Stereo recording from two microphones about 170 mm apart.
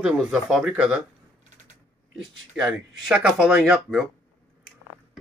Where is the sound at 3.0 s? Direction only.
5° right (ahead or behind).